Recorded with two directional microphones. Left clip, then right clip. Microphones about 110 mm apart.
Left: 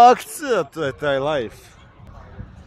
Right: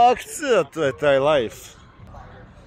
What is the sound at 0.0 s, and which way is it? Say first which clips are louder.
Speech: left 5 dB; 50° left (ahead or behind).